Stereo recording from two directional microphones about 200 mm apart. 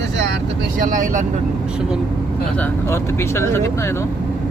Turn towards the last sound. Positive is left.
turn(degrees=15)  # may be behind; listen again after turning